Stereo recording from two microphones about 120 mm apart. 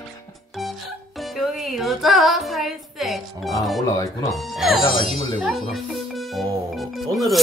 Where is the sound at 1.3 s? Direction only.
Centre (ahead or behind).